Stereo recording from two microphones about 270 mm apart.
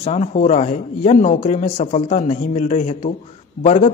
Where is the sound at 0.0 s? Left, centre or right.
Left.